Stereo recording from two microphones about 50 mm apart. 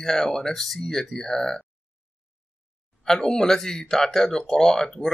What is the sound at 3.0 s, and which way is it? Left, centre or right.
Speech, centre.